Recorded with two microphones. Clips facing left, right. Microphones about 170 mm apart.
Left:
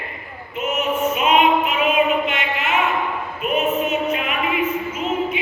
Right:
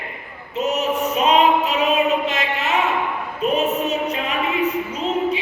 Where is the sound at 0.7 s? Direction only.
35° right (ahead or behind).